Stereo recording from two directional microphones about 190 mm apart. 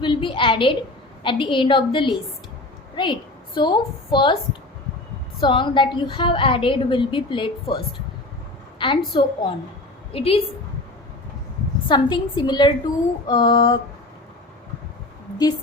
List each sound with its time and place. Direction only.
0.0 s a woman's voice: 25° left (ahead or behind)
5.4 s a woman's voice: 25° left (ahead or behind)
8.8 s a woman's voice: 25° left (ahead or behind)
11.9 s a woman's voice: 25° left (ahead or behind)